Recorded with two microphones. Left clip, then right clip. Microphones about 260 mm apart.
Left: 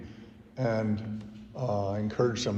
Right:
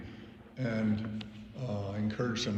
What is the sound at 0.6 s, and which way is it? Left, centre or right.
Speech, centre.